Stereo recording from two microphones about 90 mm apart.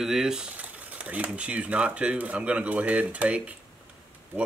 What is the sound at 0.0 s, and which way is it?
Speech, 5° right (ahead or behind).